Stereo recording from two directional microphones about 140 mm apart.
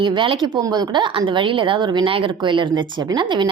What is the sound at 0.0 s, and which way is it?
Speech, 35° right (ahead or behind).